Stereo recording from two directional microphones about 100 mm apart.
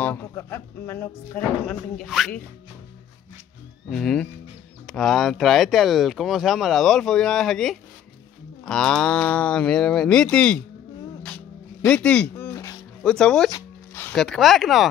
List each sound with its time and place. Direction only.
0.0 s speech: 20° left (ahead or behind)
2.0 s speech: centre (ahead or behind)
3.9 s speech: 5° left (ahead or behind)
11.9 s speech: 10° left (ahead or behind)